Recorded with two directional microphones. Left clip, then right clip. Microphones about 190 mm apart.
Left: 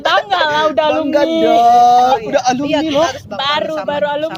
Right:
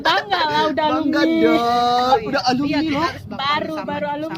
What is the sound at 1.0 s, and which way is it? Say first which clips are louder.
Speech: left 4 dB; 25° right (ahead or behind).